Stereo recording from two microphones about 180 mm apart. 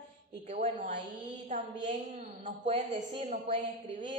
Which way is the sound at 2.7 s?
40° right (ahead or behind).